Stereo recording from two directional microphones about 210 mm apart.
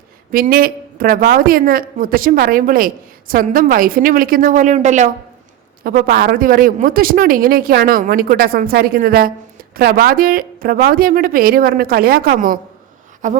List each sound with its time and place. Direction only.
0.3 s a woman's voice: 45° right (ahead or behind)